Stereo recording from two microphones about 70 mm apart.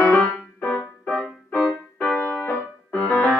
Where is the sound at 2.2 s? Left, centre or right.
Left.